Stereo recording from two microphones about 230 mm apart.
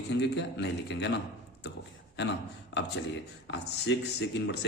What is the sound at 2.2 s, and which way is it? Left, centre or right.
A man's voice, left.